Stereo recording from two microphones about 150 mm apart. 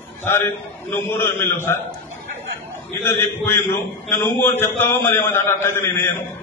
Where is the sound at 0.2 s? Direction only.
15° left (ahead or behind).